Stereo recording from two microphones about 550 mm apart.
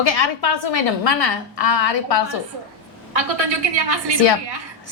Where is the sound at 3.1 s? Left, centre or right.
Right.